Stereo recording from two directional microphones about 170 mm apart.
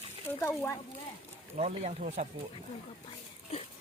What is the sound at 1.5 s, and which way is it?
Speech, 40° right (ahead or behind).